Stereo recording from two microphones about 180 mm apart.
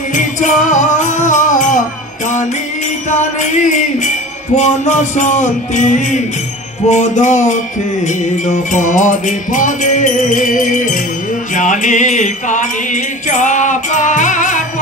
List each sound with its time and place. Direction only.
0.1 s music: 45° left (ahead or behind)
3.2 s music: 40° left (ahead or behind)